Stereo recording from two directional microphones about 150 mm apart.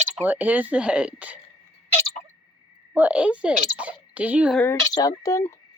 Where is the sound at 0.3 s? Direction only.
10° right (ahead or behind).